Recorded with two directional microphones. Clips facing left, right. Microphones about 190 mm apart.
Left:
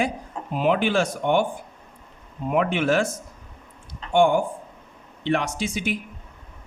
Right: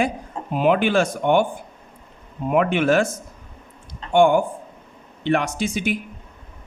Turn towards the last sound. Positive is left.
turn(degrees=-50)  # may be behind; listen again after turning